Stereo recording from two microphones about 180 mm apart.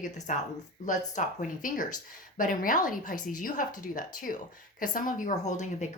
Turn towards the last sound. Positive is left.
turn(degrees=40)  # may be behind; listen again after turning